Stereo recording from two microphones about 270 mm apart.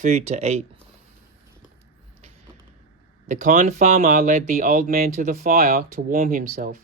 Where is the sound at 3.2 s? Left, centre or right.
Right.